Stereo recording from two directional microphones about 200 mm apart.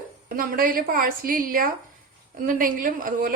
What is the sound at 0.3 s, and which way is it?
A woman's voice, 45° right (ahead or behind).